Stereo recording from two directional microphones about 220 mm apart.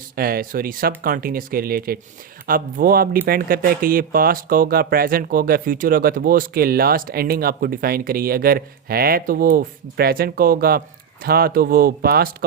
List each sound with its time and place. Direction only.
0.2 s speech: 40° right (ahead or behind)